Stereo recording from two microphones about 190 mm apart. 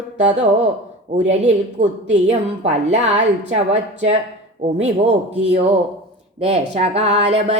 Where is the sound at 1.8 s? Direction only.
40° right (ahead or behind).